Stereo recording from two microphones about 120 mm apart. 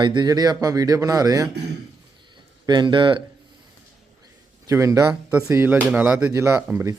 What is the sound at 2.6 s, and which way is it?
Speech, 40° right (ahead or behind).